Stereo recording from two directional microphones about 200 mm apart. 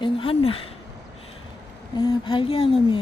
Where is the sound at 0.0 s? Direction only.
25° left (ahead or behind).